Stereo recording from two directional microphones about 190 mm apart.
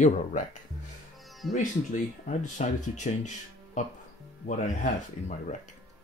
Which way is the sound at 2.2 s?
40° left (ahead or behind).